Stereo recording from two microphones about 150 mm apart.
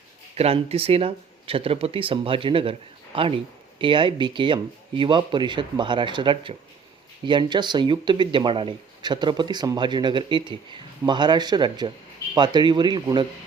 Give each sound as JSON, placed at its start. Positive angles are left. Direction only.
{"t": 0.3, "sound": "speech", "side_deg": -40}